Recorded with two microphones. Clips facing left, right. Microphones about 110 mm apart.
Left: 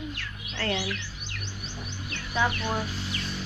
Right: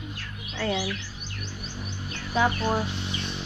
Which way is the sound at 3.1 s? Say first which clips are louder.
Right 1 dB; 25° right (ahead or behind).